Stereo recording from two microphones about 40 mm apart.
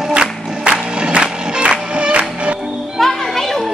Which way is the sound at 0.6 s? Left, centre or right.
Right.